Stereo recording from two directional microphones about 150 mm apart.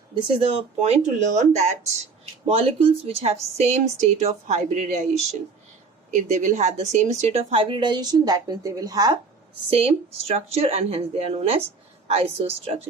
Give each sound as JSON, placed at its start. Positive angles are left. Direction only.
{"t": 0.1, "sound": "a woman's voice", "side_deg": -40}
{"t": 2.5, "sound": "a woman's voice", "side_deg": -40}
{"t": 9.6, "sound": "a woman's voice", "side_deg": -40}